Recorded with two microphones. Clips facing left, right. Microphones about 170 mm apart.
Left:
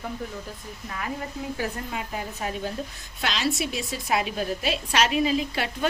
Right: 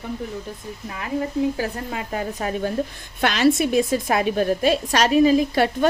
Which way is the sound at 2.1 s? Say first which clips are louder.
Right 8 dB; 55° right (ahead or behind).